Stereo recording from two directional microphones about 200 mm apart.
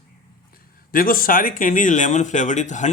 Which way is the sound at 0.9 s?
45° left (ahead or behind).